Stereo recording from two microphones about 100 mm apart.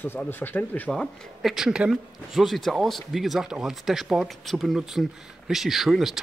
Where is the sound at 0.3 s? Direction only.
20° left (ahead or behind).